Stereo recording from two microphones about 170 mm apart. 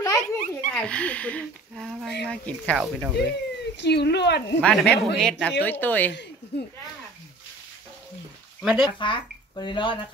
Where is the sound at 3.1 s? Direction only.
90° left.